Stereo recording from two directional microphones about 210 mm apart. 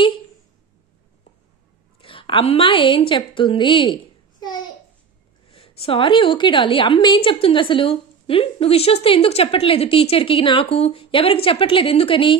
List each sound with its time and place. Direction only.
2.0 s a woman's voice: 25° left (ahead or behind)